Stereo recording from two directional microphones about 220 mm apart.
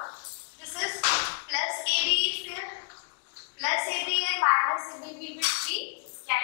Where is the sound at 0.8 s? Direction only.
15° left (ahead or behind).